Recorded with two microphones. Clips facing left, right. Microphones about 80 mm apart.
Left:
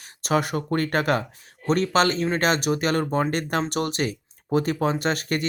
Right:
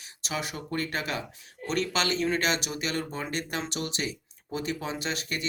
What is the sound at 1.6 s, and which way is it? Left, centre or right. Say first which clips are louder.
Speech: left 8 dB; left.